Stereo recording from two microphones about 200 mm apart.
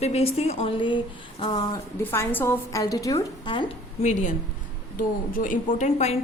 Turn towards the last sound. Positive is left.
turn(degrees=35)  # may be behind; listen again after turning